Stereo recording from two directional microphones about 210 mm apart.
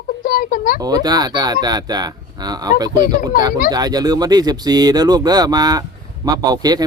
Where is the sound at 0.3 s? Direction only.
40° left (ahead or behind).